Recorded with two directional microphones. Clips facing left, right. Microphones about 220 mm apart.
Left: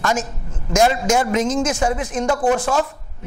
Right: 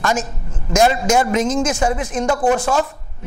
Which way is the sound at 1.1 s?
25° right (ahead or behind).